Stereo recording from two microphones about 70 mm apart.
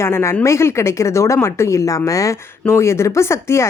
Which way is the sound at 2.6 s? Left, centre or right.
Left.